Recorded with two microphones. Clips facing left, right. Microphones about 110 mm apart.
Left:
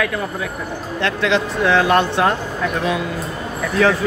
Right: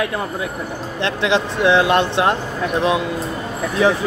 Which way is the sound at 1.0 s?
20° right (ahead or behind).